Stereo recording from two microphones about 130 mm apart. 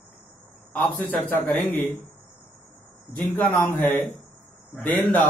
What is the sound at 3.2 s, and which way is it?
Speech, 10° left (ahead or behind).